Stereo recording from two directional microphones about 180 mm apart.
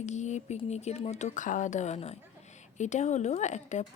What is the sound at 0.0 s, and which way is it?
Speech, 40° left (ahead or behind).